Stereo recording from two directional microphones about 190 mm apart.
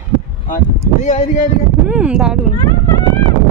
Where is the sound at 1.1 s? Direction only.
40° left (ahead or behind).